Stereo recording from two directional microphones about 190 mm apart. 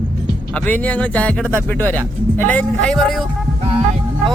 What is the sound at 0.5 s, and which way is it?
A man's voice, 10° left (ahead or behind).